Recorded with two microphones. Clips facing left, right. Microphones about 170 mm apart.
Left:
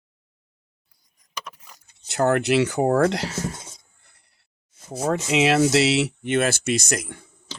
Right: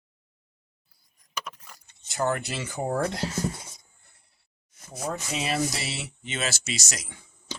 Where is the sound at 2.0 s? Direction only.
70° left (ahead or behind).